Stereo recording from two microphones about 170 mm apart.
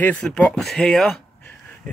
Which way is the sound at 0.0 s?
5° left (ahead or behind).